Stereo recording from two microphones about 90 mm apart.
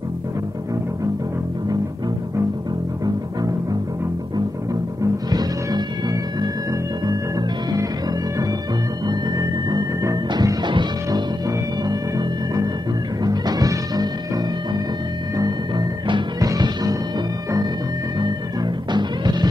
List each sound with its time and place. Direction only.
5.0 s music: 45° right (ahead or behind)
13.2 s music: 45° right (ahead or behind)
18.2 s music: 55° right (ahead or behind)